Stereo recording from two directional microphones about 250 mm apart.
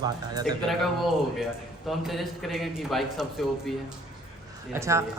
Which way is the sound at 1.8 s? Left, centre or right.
Centre.